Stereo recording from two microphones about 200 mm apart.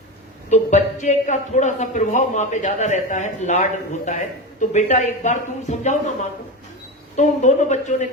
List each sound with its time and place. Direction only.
0.5 s a man's voice: 35° left (ahead or behind)
7.2 s a man's voice: 35° left (ahead or behind)